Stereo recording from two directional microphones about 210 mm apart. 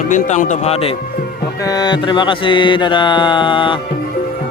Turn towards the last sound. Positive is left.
turn(degrees=20)  # may be behind; listen again after turning